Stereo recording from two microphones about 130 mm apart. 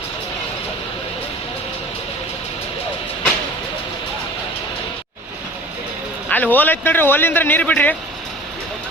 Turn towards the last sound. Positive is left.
turn(degrees=10)  # may be behind; listen again after turning